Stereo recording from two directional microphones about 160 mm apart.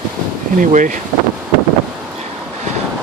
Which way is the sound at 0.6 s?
55° right (ahead or behind).